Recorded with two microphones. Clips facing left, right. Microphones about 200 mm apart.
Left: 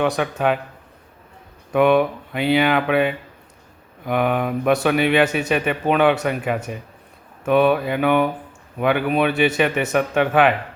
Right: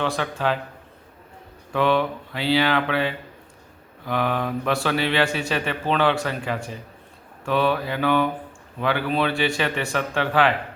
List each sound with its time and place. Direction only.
0.0 s speech: 15° left (ahead or behind)
1.7 s speech: 15° left (ahead or behind)
4.0 s speech: 15° left (ahead or behind)